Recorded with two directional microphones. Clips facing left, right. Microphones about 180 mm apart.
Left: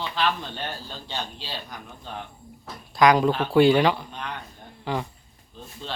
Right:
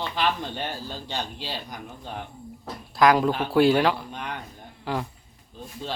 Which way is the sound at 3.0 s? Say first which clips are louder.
Left 1 dB; 5° right (ahead or behind).